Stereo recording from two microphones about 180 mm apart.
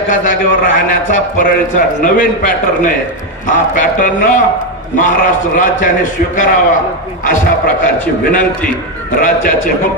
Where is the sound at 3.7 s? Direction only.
50° left (ahead or behind).